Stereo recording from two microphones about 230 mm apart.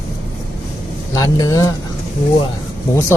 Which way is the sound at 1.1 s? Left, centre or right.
Centre.